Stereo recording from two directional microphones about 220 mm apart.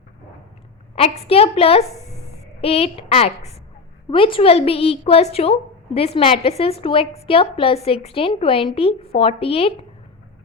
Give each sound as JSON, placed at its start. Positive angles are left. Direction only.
{"t": 0.9, "sound": "a woman's voice", "side_deg": 25}